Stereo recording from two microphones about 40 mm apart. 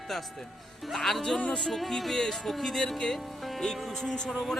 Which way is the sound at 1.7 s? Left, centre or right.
Centre.